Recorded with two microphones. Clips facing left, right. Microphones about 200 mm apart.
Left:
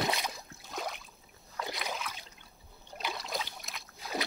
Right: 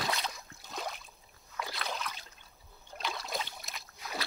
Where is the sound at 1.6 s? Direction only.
20° left (ahead or behind).